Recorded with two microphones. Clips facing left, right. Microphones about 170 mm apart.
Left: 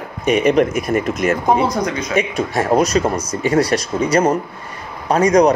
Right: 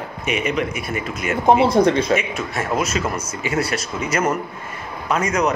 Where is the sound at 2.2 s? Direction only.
35° left (ahead or behind).